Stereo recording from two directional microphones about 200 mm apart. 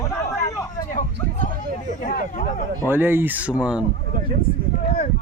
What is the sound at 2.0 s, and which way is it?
Speech, 45° left (ahead or behind).